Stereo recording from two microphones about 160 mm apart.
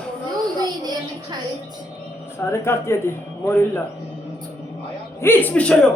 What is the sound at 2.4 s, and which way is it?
A man's voice, 15° left (ahead or behind).